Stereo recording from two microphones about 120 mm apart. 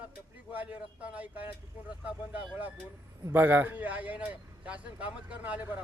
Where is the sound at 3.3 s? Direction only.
15° right (ahead or behind).